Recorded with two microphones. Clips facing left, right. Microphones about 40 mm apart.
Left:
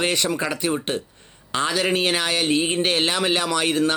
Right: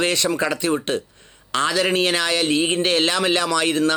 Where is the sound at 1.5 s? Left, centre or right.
Left.